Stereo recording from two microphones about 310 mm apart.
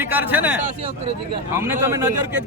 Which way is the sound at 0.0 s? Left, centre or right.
Centre.